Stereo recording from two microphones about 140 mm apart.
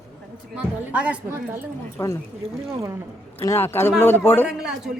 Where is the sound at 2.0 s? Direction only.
20° left (ahead or behind).